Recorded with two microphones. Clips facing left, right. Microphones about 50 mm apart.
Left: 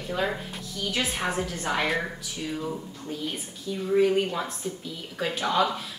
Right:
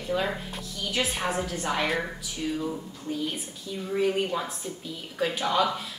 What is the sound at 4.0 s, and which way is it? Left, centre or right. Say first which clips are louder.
Speech: left 2 dB; centre.